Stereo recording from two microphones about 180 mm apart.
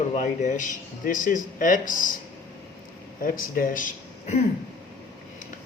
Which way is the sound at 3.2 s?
50° left (ahead or behind).